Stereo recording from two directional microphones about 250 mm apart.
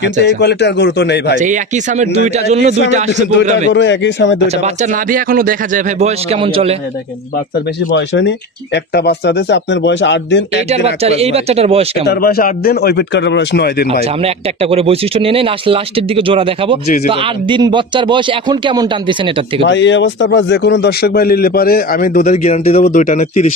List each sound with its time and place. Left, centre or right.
0.0 s speech: left
1.4 s speech: right
3.7 s speech: left
5.1 s speech: right
7.9 s speech: left
11.0 s speech: right
12.1 s a man's voice: left
14.2 s speech: right
19.6 s a man's voice: left